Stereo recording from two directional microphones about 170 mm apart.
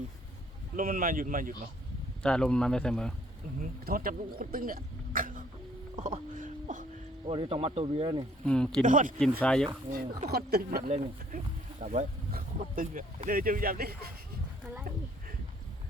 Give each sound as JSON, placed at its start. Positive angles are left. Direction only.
{"t": 0.8, "sound": "speech", "side_deg": -55}
{"t": 2.2, "sound": "speech", "side_deg": 5}
{"t": 3.8, "sound": "speech", "side_deg": -60}
{"t": 6.0, "sound": "a sound", "side_deg": -50}
{"t": 7.3, "sound": "speech", "side_deg": -35}
{"t": 8.4, "sound": "speech", "side_deg": 5}
{"t": 8.8, "sound": "speech", "side_deg": -50}
{"t": 9.4, "sound": "speech", "side_deg": 5}
{"t": 9.9, "sound": "speech", "side_deg": -60}
{"t": 10.8, "sound": "speech", "side_deg": -45}
{"t": 12.3, "sound": "speech", "side_deg": -55}